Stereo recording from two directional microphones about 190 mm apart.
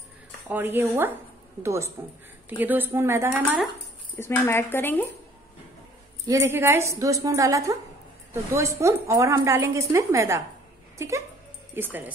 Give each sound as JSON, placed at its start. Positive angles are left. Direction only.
{"t": 0.5, "sound": "a woman's voice", "side_deg": -10}
{"t": 4.2, "sound": "speech", "side_deg": 10}
{"t": 6.2, "sound": "a woman's voice", "side_deg": -15}